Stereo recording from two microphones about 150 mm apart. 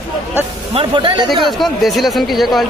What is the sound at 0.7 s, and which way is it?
Speech, 35° right (ahead or behind).